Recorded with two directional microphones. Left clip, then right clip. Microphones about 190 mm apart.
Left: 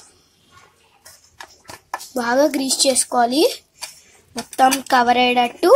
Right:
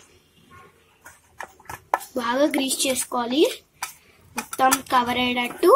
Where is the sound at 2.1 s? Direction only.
30° left (ahead or behind).